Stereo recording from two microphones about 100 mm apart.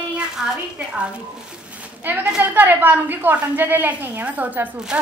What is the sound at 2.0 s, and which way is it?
A woman's voice, 20° right (ahead or behind).